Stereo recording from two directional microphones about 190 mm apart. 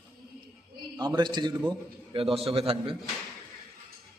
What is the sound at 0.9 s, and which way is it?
A man's voice, 20° right (ahead or behind).